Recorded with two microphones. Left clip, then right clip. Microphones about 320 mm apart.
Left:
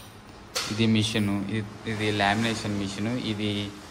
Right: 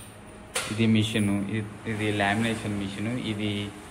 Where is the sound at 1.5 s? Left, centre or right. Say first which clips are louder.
Even; left.